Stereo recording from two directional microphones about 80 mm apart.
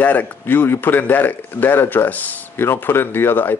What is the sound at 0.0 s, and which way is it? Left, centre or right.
A man's voice, left.